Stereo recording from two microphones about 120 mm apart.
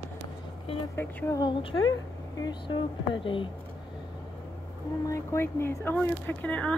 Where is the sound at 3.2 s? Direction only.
45° left (ahead or behind).